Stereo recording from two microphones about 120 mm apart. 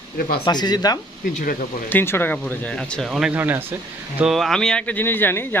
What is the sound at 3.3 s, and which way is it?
Speech, 15° right (ahead or behind).